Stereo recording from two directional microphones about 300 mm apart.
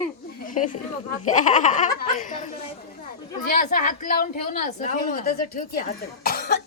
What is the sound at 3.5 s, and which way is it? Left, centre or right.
A woman's voice, left.